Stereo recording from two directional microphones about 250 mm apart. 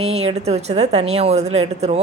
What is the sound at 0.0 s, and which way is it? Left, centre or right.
A woman's voice, right.